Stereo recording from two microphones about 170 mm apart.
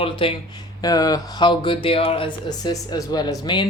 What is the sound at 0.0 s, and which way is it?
Speech, 30° left (ahead or behind).